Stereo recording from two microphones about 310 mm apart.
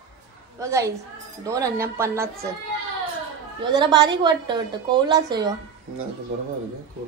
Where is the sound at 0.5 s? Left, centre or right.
Centre.